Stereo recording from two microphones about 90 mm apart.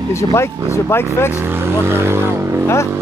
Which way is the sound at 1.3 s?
25° right (ahead or behind).